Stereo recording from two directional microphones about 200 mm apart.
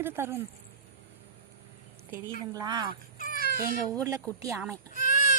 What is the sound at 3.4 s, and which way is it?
Cat, 45° right (ahead or behind).